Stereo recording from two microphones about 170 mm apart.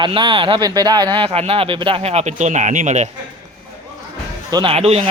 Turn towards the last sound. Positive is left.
turn(degrees=-35)  # may be behind; listen again after turning